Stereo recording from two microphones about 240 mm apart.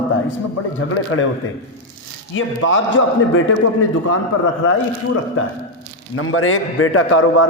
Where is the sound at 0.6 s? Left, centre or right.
Left.